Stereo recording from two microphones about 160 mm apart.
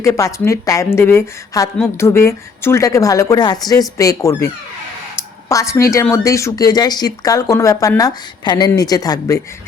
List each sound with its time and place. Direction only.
0.0 s speech: 20° left (ahead or behind)
5.5 s speech: 20° left (ahead or behind)